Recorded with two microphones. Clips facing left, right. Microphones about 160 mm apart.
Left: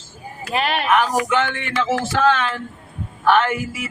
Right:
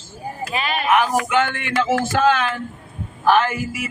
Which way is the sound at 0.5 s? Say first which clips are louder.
Left 4 dB; 70° left (ahead or behind).